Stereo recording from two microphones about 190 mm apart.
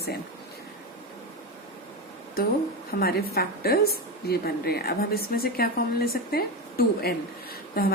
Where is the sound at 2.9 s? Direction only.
55° left (ahead or behind).